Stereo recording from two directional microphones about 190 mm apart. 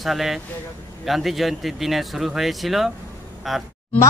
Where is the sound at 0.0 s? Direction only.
Centre (ahead or behind).